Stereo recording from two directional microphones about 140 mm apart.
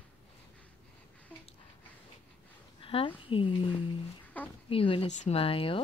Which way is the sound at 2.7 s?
40° left (ahead or behind).